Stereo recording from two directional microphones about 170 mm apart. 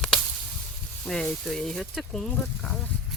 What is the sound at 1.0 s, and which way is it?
Speech, 5° left (ahead or behind).